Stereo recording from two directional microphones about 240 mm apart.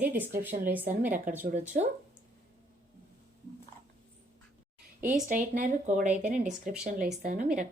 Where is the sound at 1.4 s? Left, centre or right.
Right.